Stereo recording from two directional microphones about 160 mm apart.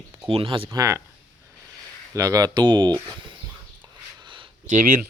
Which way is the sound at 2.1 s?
20° right (ahead or behind).